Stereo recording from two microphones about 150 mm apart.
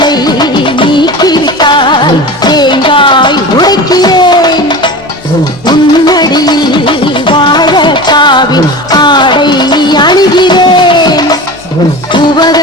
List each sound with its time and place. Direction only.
0.0 s music: 25° left (ahead or behind)